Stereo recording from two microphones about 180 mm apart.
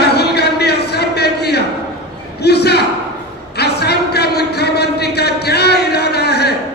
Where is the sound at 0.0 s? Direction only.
65° left (ahead or behind).